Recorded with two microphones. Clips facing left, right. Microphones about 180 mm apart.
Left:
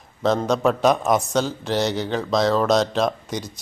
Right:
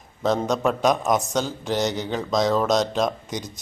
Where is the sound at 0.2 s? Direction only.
10° right (ahead or behind).